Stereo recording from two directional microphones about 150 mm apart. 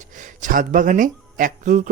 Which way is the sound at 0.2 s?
60° right (ahead or behind).